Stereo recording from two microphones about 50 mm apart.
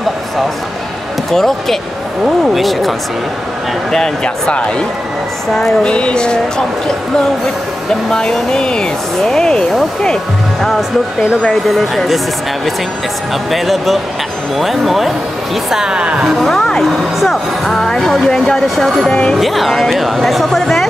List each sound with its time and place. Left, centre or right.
1.3 s speech: centre
4.2 s speech: left
5.9 s speech: left
8.1 s speech: centre
10.6 s speech: centre
13.5 s speech: centre
15.7 s speech: centre
16.4 s speech: centre
19.0 s speech: centre
19.3 s speech: centre